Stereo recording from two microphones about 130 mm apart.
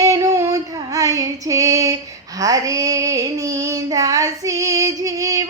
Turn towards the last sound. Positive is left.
turn(degrees=-25)  # may be behind; listen again after turning